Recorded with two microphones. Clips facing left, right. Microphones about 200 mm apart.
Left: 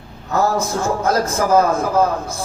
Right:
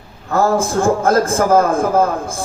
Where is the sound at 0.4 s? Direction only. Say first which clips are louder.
Right 6 dB; 50° right (ahead or behind).